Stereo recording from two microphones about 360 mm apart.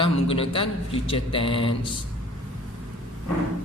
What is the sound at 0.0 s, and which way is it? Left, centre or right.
Speech, centre.